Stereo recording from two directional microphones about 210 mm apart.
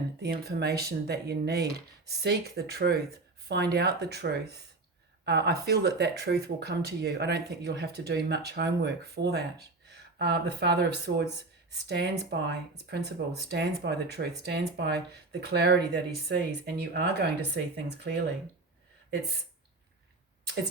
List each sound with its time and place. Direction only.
0.2 s speech: 50° right (ahead or behind)